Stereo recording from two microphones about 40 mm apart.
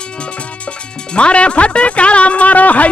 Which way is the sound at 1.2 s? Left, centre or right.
Left.